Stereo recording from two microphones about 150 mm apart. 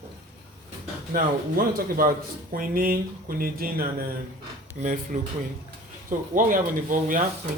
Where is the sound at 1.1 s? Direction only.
70° right (ahead or behind).